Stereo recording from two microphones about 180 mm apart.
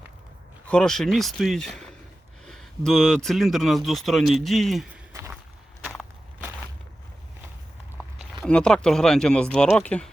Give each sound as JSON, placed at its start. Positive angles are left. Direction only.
{"t": 0.7, "sound": "speech", "side_deg": 5}
{"t": 5.1, "sound": "walk", "side_deg": -15}
{"t": 7.9, "sound": "speech", "side_deg": 0}